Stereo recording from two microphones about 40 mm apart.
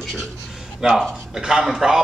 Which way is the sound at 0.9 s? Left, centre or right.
Centre.